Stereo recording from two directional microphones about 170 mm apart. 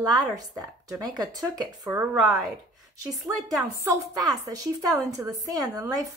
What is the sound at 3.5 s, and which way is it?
A woman's voice, 20° right (ahead or behind).